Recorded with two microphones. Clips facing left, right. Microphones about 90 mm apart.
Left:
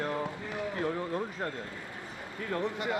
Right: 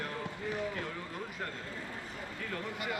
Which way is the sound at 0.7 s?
30° left (ahead or behind).